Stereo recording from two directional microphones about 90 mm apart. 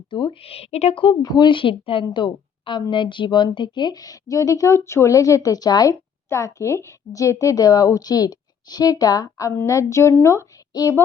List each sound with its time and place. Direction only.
0.1 s speech: 65° left (ahead or behind); by 1.1 s 85° left
1.2 s a woman's voice: 50° left (ahead or behind)
5.9 s a woman's voice: 30° left (ahead or behind)
9.5 s a woman's voice: 30° left (ahead or behind)